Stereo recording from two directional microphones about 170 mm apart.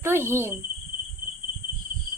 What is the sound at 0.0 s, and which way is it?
Speech, 15° right (ahead or behind).